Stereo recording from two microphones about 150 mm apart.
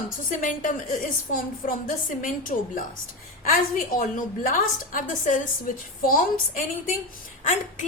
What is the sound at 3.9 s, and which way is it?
A woman's voice, 65° left (ahead or behind).